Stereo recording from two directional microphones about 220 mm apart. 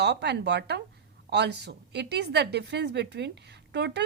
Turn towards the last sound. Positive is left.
turn(degrees=-50)  # may be behind; listen again after turning